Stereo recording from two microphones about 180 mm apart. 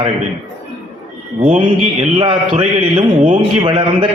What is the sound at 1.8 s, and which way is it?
A man's voice, 35° right (ahead or behind).